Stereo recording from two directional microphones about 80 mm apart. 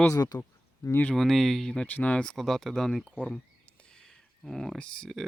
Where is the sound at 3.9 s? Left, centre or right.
Centre.